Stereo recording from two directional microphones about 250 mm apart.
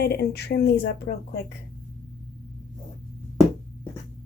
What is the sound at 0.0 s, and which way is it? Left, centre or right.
Speech, left.